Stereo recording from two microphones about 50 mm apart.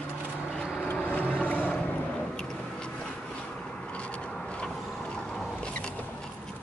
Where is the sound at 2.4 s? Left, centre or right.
Centre.